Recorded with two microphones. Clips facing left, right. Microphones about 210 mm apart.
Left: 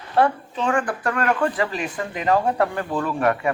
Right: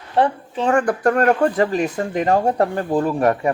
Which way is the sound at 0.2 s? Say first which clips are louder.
Right 1 dB; 35° right (ahead or behind).